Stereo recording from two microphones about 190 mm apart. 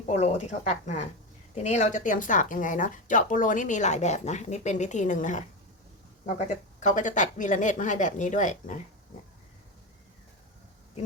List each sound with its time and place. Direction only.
0.1 s speech: 35° left (ahead or behind)
6.7 s speech: 40° left (ahead or behind)